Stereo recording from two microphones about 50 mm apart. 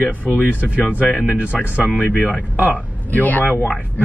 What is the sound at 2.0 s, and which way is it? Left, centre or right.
Speech, left.